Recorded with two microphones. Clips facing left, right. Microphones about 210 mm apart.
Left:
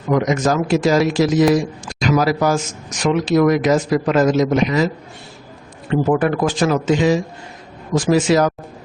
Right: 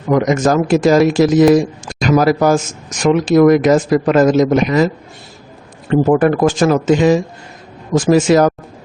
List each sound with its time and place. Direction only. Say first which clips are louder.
0.1 s a man's voice: right 4 dB; 50° right (ahead or behind)
5.9 s speech: right 5 dB; 45° right (ahead or behind)